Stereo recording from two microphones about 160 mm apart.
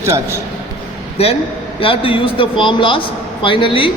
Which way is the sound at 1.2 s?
40° left (ahead or behind).